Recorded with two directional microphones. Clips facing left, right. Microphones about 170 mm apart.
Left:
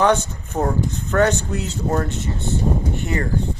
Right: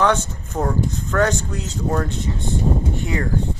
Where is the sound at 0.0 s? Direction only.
10° left (ahead or behind).